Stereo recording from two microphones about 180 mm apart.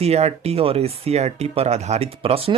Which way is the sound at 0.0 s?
35° right (ahead or behind).